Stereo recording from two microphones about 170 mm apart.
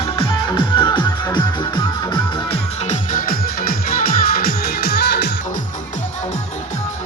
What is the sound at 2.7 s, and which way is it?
Music, 40° left (ahead or behind).